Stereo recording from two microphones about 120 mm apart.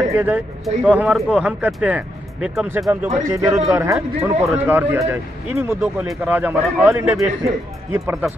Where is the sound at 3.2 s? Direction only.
25° right (ahead or behind).